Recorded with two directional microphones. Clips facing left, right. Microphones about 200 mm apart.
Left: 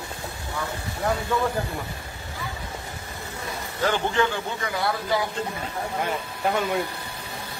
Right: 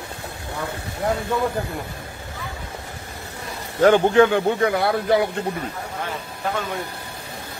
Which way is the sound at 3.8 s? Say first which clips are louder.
Right 10 dB; 55° right (ahead or behind).